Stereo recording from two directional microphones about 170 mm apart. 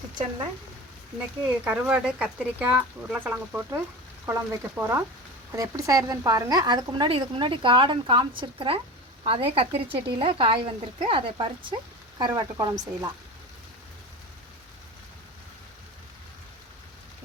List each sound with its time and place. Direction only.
1.6 s a woman's voice: 5° right (ahead or behind)